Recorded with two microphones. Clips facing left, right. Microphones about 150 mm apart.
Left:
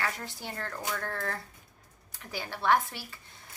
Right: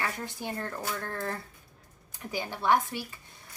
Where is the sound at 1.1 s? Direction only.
20° right (ahead or behind).